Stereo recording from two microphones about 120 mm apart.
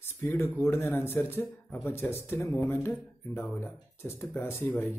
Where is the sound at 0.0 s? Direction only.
20° left (ahead or behind).